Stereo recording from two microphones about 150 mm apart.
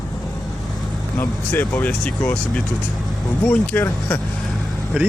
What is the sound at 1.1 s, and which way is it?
Speech, 10° left (ahead or behind).